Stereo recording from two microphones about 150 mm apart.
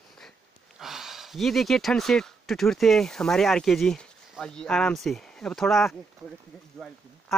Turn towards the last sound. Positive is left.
turn(degrees=0)  # may be behind; listen again after turning